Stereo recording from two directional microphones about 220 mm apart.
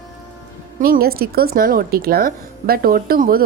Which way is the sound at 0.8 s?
40° right (ahead or behind).